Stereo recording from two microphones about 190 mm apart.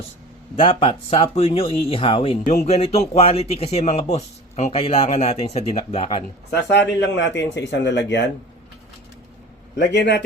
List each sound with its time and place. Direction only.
0.5 s speech: 30° left (ahead or behind)
6.5 s speech: 65° left (ahead or behind)
9.7 s a man's voice: 60° left (ahead or behind)